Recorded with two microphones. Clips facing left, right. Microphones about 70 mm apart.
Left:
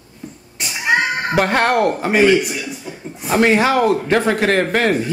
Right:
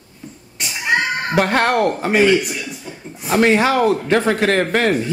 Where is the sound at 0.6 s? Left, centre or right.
Centre.